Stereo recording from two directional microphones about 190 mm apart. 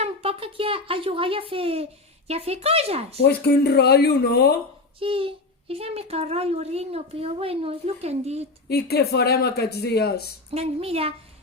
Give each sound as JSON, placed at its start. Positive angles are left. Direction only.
{"t": 0.0, "sound": "a child's voice", "side_deg": -30}
{"t": 3.2, "sound": "speech", "side_deg": 60}
{"t": 4.9, "sound": "a child's voice", "side_deg": -30}
{"t": 8.7, "sound": "speech", "side_deg": 55}
{"t": 10.5, "sound": "a child's voice", "side_deg": -30}